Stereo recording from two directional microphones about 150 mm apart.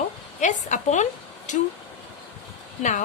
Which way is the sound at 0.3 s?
55° left (ahead or behind).